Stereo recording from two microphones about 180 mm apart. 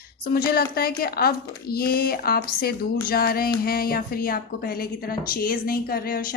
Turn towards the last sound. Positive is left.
turn(degrees=55)  # may be behind; listen again after turning